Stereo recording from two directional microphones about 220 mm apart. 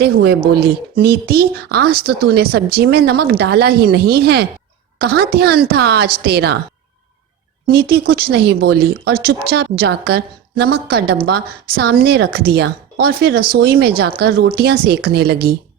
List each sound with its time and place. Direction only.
0.0 s speech: 50° right (ahead or behind)
7.7 s speech: 45° right (ahead or behind)